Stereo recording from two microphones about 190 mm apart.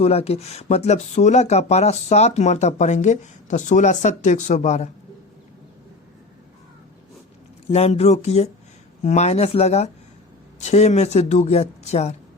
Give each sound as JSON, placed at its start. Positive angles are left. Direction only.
{"t": 0.0, "sound": "speech", "side_deg": 30}
{"t": 7.7, "sound": "speech", "side_deg": 35}